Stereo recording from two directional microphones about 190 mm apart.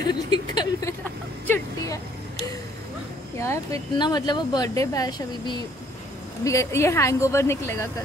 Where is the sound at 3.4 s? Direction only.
15° left (ahead or behind).